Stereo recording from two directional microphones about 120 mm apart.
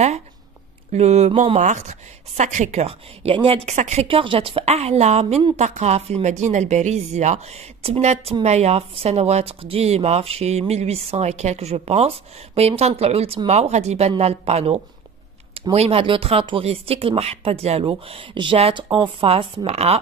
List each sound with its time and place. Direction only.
0.9 s speech: 65° right (ahead or behind)
3.3 s speech: 50° right (ahead or behind)
3.7 s speech: 75° right (ahead or behind)
4.1 s speech: 45° right (ahead or behind)